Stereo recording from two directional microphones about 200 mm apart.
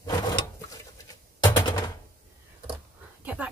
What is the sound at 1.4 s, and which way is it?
Typewriter, 20° left (ahead or behind).